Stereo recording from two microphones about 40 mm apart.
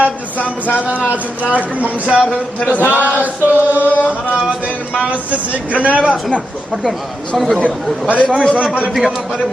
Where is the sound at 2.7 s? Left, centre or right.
Left.